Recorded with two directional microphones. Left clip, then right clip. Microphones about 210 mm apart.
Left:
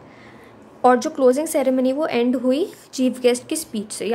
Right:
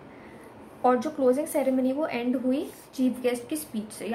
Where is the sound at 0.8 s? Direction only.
50° left (ahead or behind).